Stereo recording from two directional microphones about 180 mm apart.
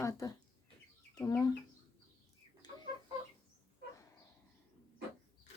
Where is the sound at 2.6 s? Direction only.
25° left (ahead or behind).